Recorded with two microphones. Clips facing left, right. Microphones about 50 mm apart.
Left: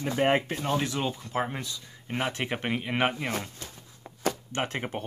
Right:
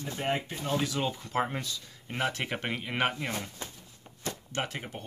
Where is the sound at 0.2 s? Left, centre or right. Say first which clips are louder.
Left 7 dB; left.